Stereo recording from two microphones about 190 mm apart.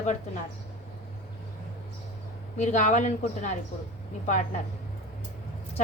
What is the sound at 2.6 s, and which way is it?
Speech, 40° left (ahead or behind).